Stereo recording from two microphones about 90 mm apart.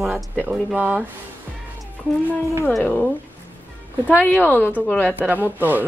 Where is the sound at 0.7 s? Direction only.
20° right (ahead or behind).